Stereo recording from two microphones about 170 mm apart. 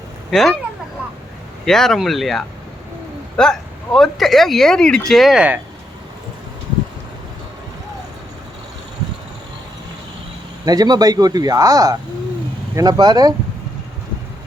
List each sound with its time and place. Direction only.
0.3 s speech: centre (ahead or behind)
1.6 s speech: centre (ahead or behind)
10.7 s speech: 25° right (ahead or behind)